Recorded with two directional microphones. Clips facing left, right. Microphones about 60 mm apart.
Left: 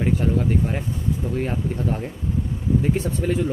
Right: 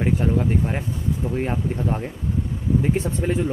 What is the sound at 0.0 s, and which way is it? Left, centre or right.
Speech, centre.